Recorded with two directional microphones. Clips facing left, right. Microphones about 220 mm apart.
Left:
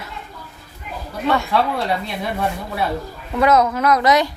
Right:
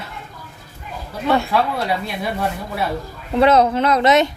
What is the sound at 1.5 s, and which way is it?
Speech, centre (ahead or behind).